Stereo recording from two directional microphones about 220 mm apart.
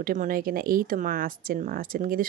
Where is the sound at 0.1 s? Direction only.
40° right (ahead or behind).